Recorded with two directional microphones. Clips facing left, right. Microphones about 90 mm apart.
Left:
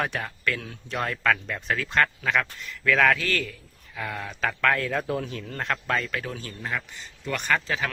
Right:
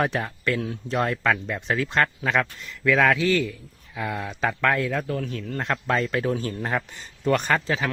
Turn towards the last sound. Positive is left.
turn(degrees=-25)  # may be behind; listen again after turning